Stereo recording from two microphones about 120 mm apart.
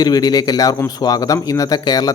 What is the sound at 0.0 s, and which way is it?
Speech, 35° left (ahead or behind).